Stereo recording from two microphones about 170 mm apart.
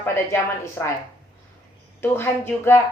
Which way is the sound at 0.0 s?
15° left (ahead or behind).